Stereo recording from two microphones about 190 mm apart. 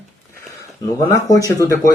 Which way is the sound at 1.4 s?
15° left (ahead or behind).